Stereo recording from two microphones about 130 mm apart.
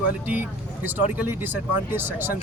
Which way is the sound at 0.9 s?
15° right (ahead or behind).